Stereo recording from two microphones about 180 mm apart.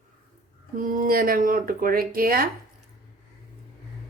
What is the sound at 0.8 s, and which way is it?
Speech, 50° right (ahead or behind).